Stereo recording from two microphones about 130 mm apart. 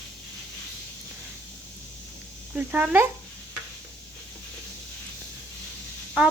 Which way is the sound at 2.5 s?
10° right (ahead or behind).